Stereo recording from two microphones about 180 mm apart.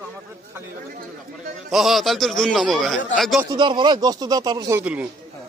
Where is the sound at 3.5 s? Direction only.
25° right (ahead or behind).